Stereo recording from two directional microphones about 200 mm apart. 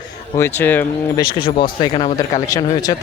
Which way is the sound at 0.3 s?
10° left (ahead or behind).